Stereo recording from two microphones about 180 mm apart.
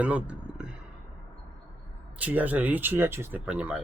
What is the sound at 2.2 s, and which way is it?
Speech, 10° right (ahead or behind).